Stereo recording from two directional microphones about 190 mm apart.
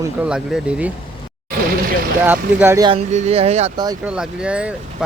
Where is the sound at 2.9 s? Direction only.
35° right (ahead or behind).